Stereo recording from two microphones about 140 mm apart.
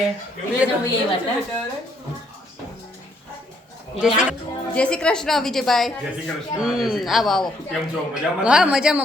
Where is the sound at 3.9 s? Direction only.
5° right (ahead or behind).